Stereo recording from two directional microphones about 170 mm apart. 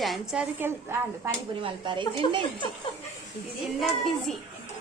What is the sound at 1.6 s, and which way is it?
Speech, 30° right (ahead or behind).